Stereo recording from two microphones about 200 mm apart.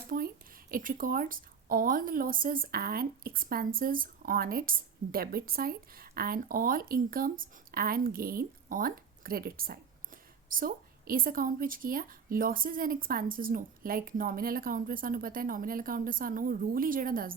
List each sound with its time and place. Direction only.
0.1 s a woman's voice: 40° right (ahead or behind)